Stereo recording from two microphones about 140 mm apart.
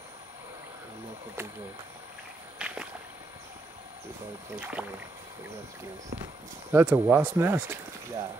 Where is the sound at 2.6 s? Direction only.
5° right (ahead or behind).